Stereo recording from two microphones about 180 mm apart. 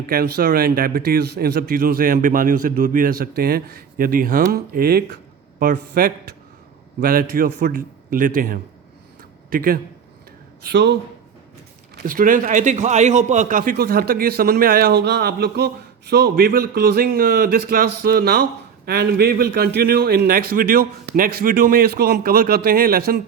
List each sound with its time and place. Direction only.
0.1 s a man's voice: 55° right (ahead or behind)
10.7 s speech: 70° right (ahead or behind)
11.9 s a man's voice: 50° right (ahead or behind)